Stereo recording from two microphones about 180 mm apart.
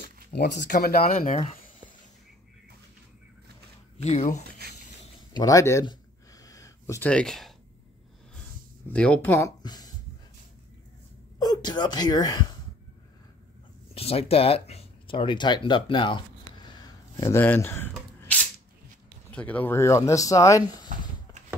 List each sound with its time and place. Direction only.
0.3 s speech: 65° left (ahead or behind)
1.3 s speech: 35° left (ahead or behind)
4.0 s speech: 40° left (ahead or behind)
5.3 s a sound: 20° left (ahead or behind)
7.1 s speech: 5° left (ahead or behind)
8.8 s speech: 5° left (ahead or behind); by 9.9 s 20° left (ahead or behind)
11.3 s speech: 20° left (ahead or behind)
13.9 s speech: 35° left (ahead or behind); by 17.9 s 10° left (ahead or behind)
19.3 s speech: 10° left (ahead or behind)